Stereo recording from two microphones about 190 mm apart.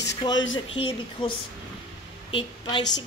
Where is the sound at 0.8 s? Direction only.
25° left (ahead or behind).